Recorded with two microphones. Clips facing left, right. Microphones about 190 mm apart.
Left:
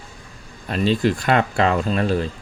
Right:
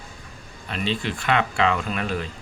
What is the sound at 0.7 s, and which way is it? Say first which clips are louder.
Speech: left 8 dB; 40° left (ahead or behind).